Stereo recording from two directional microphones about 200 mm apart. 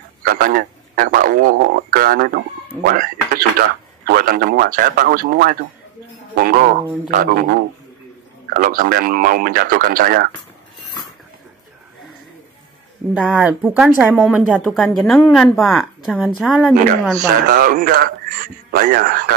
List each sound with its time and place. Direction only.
0.2 s speech: 45° right (ahead or behind)
8.5 s speech: 45° right (ahead or behind)
13.3 s speech: 5° right (ahead or behind)
17.5 s speech: 45° right (ahead or behind)